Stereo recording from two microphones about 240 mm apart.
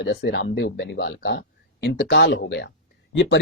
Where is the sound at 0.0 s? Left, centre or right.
Left.